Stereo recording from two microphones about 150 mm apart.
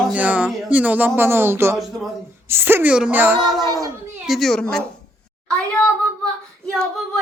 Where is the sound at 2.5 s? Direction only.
15° right (ahead or behind).